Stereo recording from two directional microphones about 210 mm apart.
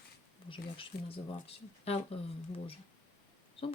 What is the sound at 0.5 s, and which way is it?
Speech, 25° left (ahead or behind).